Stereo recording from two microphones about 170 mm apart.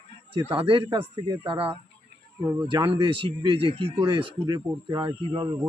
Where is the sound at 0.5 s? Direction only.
30° right (ahead or behind).